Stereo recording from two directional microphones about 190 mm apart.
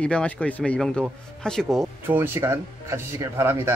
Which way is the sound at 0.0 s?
5° left (ahead or behind).